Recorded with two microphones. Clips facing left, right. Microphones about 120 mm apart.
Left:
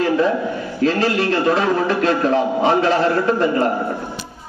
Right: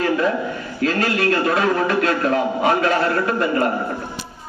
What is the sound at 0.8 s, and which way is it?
A man's voice, 30° left (ahead or behind).